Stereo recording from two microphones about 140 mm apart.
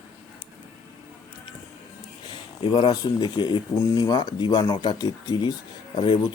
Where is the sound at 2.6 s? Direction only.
35° left (ahead or behind).